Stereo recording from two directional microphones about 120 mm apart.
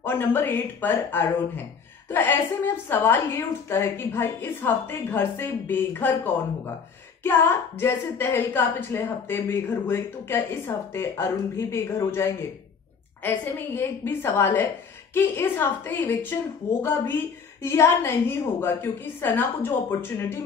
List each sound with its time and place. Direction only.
0.0 s speech: 20° left (ahead or behind)
7.2 s a woman's voice: 20° left (ahead or behind)
17.6 s speech: 20° left (ahead or behind)